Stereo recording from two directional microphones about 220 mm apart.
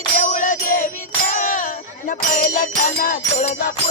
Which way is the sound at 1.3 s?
35° left (ahead or behind).